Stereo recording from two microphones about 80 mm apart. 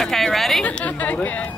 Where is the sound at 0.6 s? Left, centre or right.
Centre.